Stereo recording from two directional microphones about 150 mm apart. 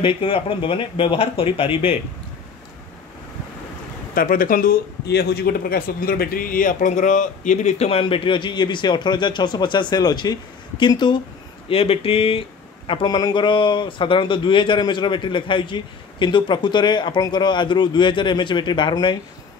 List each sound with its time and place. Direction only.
0.0 s speech: 35° left (ahead or behind)
4.1 s speech: 70° left (ahead or behind); by 19.1 s 30° left (ahead or behind)